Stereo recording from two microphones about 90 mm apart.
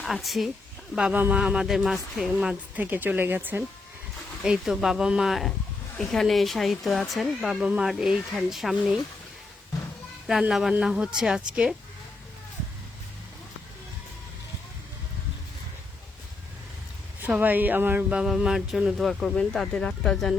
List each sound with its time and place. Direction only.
0.0 s speech: centre (ahead or behind)
2.7 s speech: 20° right (ahead or behind)
4.4 s speech: 5° right (ahead or behind)
7.5 s speech: 10° right (ahead or behind)
10.5 s speech: 5° right (ahead or behind)
17.2 s speech: 20° right (ahead or behind)
18.2 s speech: 5° right (ahead or behind)